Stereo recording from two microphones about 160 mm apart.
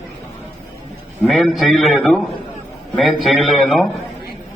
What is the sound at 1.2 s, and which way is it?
A man's voice, centre (ahead or behind).